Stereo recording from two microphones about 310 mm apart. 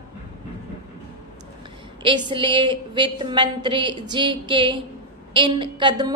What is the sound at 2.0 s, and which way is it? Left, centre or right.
A woman's voice, centre.